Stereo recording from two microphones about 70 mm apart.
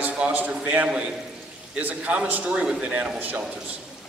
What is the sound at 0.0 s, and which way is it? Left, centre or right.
A man's voice, right.